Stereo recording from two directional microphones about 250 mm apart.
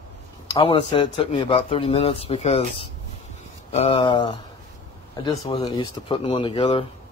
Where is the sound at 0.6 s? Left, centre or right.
Left.